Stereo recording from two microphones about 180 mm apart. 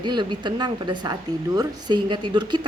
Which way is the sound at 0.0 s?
25° right (ahead or behind).